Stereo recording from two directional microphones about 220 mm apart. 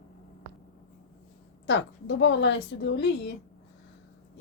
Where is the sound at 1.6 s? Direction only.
55° left (ahead or behind).